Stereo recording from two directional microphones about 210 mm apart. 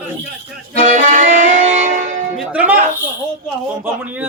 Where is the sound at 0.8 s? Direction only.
35° right (ahead or behind).